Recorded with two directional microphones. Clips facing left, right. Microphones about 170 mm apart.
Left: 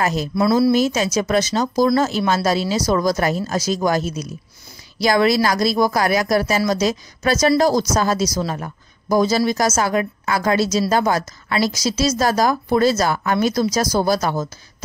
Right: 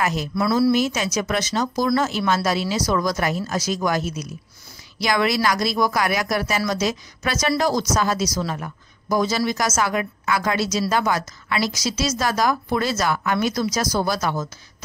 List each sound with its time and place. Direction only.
0.0 s speech: 35° left (ahead or behind)